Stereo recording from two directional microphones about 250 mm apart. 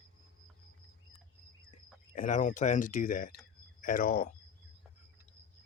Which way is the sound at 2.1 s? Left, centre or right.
Left.